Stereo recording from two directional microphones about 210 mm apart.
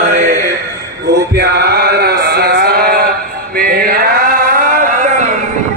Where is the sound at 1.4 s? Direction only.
50° right (ahead or behind).